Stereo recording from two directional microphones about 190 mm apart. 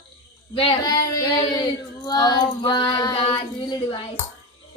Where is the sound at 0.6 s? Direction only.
25° left (ahead or behind).